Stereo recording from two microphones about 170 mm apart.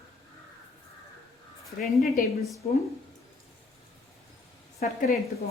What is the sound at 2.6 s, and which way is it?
Speech, 45° left (ahead or behind).